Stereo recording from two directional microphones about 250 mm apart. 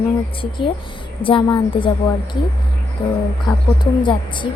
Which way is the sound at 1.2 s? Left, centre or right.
Centre.